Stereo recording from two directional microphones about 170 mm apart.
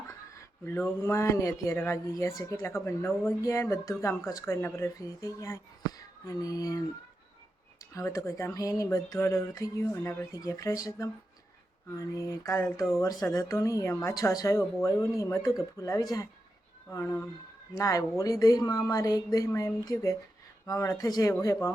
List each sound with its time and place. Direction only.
0.6 s speech: 15° left (ahead or behind)
6.0 s female singing: 20° left (ahead or behind)
7.9 s speech: 15° left (ahead or behind)
12.3 s a woman's voice: 15° left (ahead or behind)